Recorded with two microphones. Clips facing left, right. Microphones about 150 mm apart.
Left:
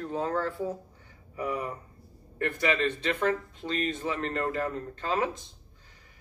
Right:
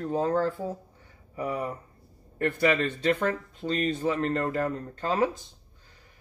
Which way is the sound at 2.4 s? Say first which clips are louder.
Right 3 dB; 40° right (ahead or behind).